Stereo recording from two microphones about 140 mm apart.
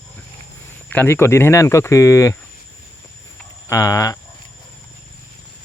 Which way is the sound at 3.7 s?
20° left (ahead or behind).